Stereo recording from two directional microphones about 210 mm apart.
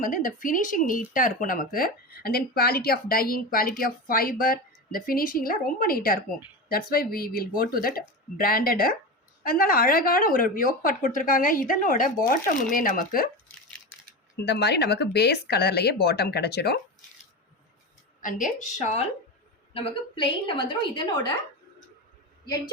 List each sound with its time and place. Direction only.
0.0 s speech: 40° left (ahead or behind)
14.3 s speech: 50° left (ahead or behind)
18.2 s a woman's voice: 40° left (ahead or behind)